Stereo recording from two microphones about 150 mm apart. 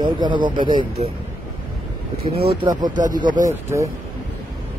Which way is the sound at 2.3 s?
90° right.